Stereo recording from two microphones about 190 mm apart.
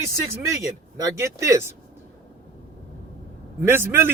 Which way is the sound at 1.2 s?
15° right (ahead or behind).